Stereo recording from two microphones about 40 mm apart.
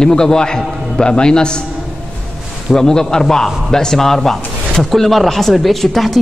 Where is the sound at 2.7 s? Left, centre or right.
Centre.